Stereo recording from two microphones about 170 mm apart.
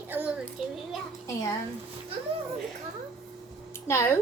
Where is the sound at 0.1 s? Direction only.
10° right (ahead or behind).